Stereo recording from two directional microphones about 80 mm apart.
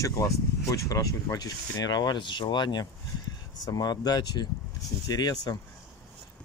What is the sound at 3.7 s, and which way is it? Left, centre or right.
Speech, left.